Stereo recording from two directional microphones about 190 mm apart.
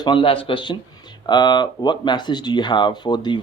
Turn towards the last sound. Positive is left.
turn(degrees=25)  # may be behind; listen again after turning